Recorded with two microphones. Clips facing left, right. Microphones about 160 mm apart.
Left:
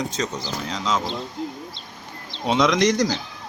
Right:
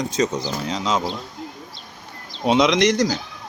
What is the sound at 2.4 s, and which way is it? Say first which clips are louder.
Speech: right 3 dB; 15° right (ahead or behind).